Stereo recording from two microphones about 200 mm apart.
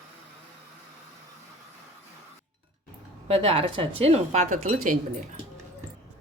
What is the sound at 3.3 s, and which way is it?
Speech, 30° right (ahead or behind).